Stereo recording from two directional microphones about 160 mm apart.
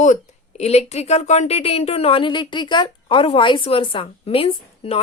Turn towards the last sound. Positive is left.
turn(degrees=35)  # may be behind; listen again after turning